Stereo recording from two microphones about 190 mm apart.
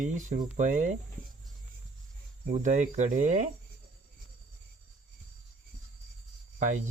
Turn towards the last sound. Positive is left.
turn(degrees=-45)  # may be behind; listen again after turning